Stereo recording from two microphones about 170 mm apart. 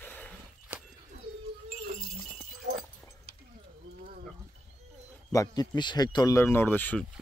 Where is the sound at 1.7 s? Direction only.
45° right (ahead or behind).